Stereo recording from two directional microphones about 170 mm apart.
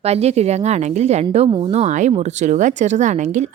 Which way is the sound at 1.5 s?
25° right (ahead or behind).